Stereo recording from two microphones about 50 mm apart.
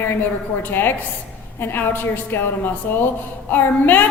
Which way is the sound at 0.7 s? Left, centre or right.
Left.